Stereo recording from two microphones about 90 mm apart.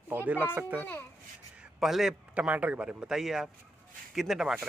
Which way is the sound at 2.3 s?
15° right (ahead or behind).